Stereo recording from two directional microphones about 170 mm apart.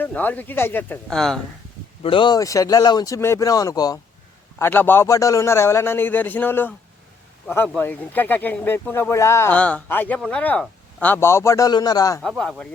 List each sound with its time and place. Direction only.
0.0 s speech: 10° left (ahead or behind)
2.0 s a man's voice: 30° left (ahead or behind)
12.4 s speech: 5° left (ahead or behind)